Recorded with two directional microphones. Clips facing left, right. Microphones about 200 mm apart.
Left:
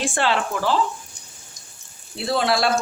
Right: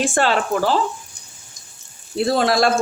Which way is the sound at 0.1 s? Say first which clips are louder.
Right 4 dB; 45° right (ahead or behind).